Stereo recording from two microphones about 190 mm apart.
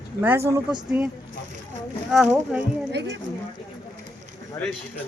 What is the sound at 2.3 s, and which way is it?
Speech, 10° right (ahead or behind).